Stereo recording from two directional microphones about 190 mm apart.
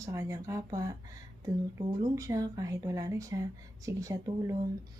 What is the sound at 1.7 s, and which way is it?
Speech, 15° right (ahead or behind).